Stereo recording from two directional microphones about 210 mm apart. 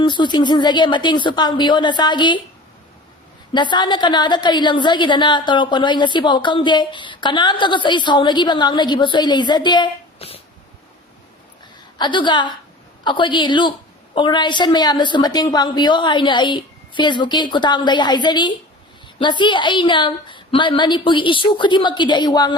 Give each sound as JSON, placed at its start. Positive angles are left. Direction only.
{"t": 0.0, "sound": "a woman's voice", "side_deg": 20}
{"t": 3.5, "sound": "a woman's voice", "side_deg": 20}
{"t": 11.9, "sound": "a woman's voice", "side_deg": 20}